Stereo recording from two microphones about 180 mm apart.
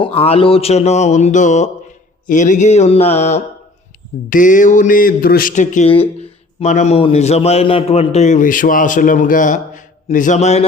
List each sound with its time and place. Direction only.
0.0 s a man's voice: 35° left (ahead or behind)